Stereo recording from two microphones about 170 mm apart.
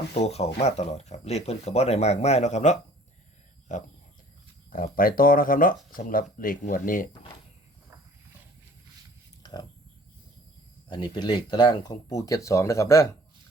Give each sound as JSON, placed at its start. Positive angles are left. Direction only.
{"t": 0.1, "sound": "speech", "side_deg": 40}
{"t": 9.4, "sound": "a sound", "side_deg": 25}
{"t": 10.8, "sound": "speech", "side_deg": 25}